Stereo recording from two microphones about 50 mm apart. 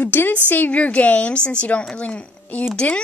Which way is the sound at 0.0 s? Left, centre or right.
Left.